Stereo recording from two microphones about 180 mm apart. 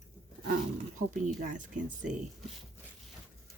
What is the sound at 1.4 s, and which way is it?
Speech, 45° right (ahead or behind).